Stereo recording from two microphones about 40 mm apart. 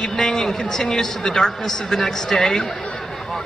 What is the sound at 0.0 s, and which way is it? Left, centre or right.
A man's voice, centre.